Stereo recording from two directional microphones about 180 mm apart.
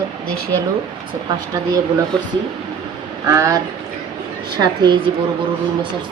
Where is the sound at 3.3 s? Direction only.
20° right (ahead or behind).